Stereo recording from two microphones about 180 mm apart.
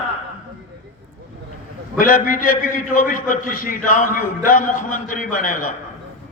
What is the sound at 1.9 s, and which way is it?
A man's voice, 50° left (ahead or behind).